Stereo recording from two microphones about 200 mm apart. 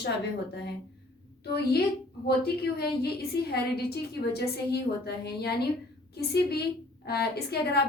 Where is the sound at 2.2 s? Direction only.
50° left (ahead or behind).